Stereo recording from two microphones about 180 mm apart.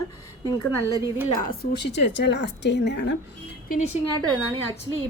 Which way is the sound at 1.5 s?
70° left (ahead or behind).